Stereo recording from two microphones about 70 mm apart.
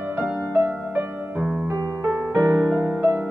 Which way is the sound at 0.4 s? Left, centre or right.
Centre.